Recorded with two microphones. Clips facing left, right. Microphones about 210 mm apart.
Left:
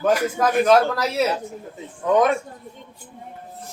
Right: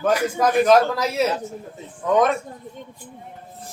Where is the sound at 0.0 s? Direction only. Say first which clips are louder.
Even; centre (ahead or behind).